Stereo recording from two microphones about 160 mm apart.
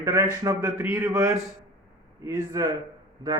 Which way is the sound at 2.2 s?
20° right (ahead or behind).